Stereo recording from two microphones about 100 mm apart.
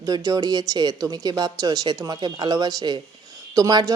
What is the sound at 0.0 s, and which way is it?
Speech, 35° right (ahead or behind).